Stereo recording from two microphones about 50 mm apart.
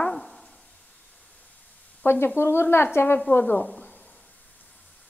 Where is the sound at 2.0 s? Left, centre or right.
Left.